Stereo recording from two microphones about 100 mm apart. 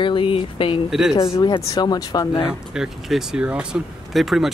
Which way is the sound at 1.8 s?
45° left (ahead or behind).